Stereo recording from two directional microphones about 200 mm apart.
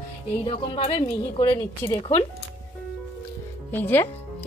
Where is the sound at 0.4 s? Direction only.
30° left (ahead or behind).